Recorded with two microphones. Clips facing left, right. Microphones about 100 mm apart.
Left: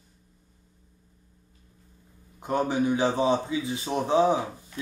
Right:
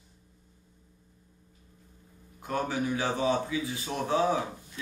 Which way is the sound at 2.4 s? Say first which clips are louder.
Left 5 dB; 25° left (ahead or behind).